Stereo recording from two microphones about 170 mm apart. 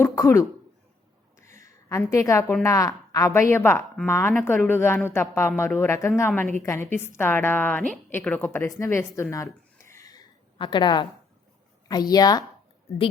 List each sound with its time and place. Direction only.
0.0 s throat clearing: 15° left (ahead or behind)
1.6 s a woman's voice: 15° left (ahead or behind)
8.8 s a sound: 15° left (ahead or behind)
11.9 s a woman's voice: 25° left (ahead or behind)